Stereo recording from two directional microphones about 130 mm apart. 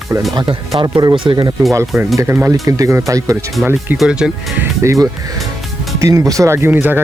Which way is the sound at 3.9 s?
5° right (ahead or behind).